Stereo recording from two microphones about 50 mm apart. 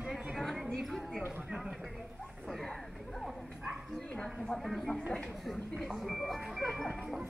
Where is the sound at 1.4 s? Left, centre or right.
Centre.